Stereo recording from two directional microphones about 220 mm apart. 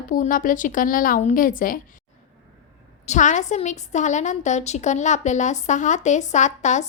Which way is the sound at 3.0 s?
35° left (ahead or behind).